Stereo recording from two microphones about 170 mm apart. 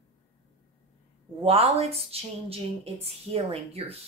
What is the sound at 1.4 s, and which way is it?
Speech, 35° right (ahead or behind).